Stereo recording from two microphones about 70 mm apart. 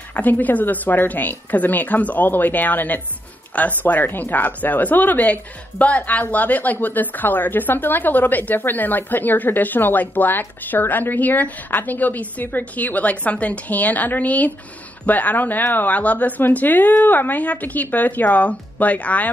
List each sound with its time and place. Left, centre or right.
0.1 s speech: left